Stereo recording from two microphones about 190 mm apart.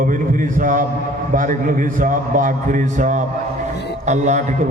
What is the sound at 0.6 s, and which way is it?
A man's voice, 45° right (ahead or behind).